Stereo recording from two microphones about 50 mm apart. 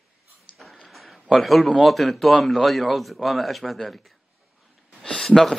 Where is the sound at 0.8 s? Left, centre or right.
Centre.